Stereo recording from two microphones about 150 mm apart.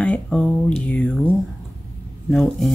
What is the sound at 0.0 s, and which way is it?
Speech, 5° left (ahead or behind).